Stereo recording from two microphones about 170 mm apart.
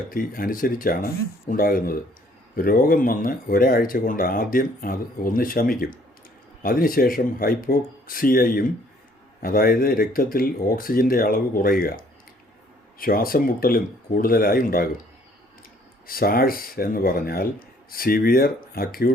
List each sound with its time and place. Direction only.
0.1 s speech: 60° left (ahead or behind)
16.0 s speech: 60° left (ahead or behind)